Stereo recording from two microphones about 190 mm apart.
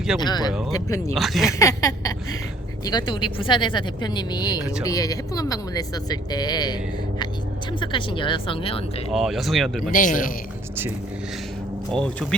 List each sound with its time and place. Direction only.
0.2 s a woman's voice: 20° left (ahead or behind)
1.1 s speech: centre (ahead or behind)
1.5 s a sound: 15° left (ahead or behind)
2.8 s a woman's voice: 25° left (ahead or behind)
9.1 s speech: centre (ahead or behind)
9.9 s a man's voice: 45° left (ahead or behind)
11.9 s speech: 5° left (ahead or behind)